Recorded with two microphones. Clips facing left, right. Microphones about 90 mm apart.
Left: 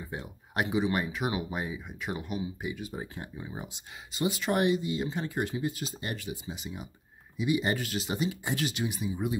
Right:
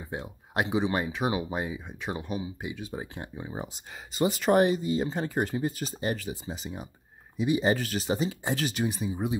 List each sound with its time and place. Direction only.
0.0 s speech: 20° right (ahead or behind)
4.2 s speech: 40° right (ahead or behind)
5.9 s speech: 30° right (ahead or behind)